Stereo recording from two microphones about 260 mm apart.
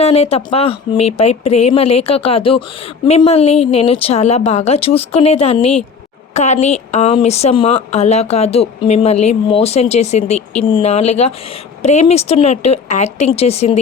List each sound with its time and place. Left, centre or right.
0.0 s a woman's voice: left